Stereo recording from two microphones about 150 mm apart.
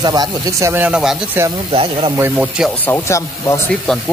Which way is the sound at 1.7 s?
35° right (ahead or behind).